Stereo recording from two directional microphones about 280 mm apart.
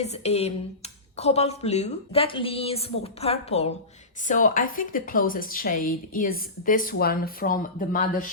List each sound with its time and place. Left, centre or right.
0.0 s a woman's voice: left